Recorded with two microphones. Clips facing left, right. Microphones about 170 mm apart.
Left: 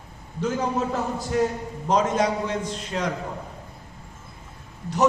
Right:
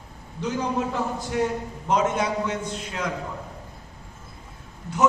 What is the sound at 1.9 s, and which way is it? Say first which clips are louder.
A man's voice: left 1 dB; 35° left (ahead or behind).